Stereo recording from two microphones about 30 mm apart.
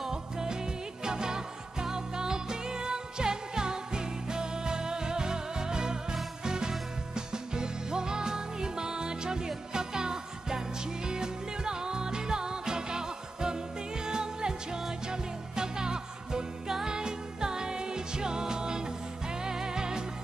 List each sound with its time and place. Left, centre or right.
0.1 s music: right